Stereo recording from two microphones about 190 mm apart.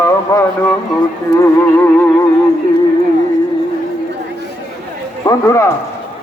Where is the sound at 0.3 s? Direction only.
20° left (ahead or behind).